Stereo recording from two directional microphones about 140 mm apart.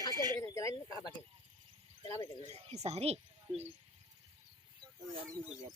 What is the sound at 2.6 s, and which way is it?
Speech, 50° right (ahead or behind).